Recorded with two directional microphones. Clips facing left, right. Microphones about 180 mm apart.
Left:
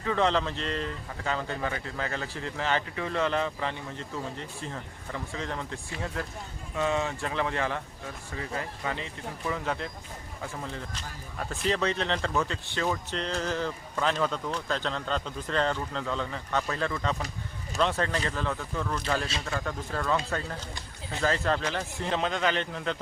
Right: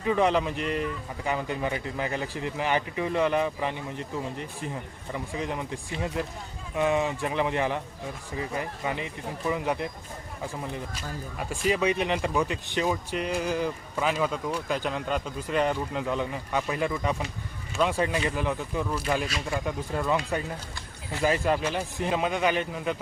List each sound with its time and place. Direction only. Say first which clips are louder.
0.0 s speech: right 3 dB; 15° right (ahead or behind)